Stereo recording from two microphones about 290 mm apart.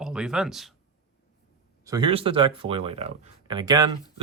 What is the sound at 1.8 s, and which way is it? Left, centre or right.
Speech, centre.